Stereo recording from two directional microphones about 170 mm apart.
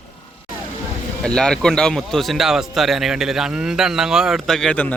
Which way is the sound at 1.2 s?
5° left (ahead or behind).